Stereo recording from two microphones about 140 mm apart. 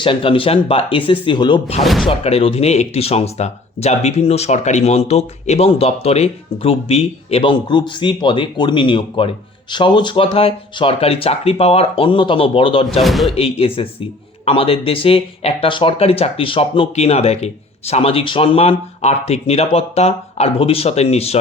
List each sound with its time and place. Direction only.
0.0 s speech: 40° left (ahead or behind)
1.8 s speech: centre (ahead or behind)
2.0 s speech: 45° left (ahead or behind)
7.7 s speech: 35° left (ahead or behind)
13.0 s speech: centre (ahead or behind)
13.3 s speech: 45° left (ahead or behind)